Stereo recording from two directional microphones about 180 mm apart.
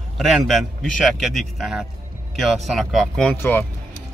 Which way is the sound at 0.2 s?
Centre (ahead or behind).